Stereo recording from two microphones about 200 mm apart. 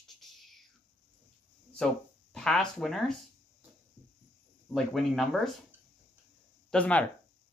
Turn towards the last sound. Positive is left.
turn(degrees=5)  # may be behind; listen again after turning